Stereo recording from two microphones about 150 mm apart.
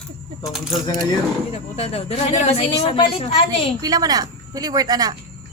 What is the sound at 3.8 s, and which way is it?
A woman's voice, 25° right (ahead or behind).